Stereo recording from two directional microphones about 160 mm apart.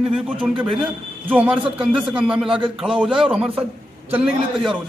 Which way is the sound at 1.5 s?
35° right (ahead or behind).